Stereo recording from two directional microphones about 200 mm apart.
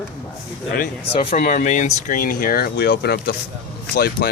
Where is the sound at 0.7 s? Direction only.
45° left (ahead or behind).